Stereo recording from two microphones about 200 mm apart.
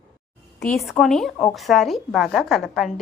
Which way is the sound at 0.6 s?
Centre (ahead or behind).